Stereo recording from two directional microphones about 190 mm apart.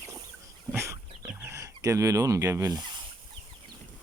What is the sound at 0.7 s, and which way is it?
Chicken, 10° right (ahead or behind).